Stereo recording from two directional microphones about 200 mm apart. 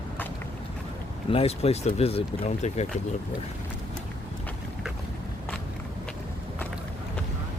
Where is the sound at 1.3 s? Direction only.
30° left (ahead or behind).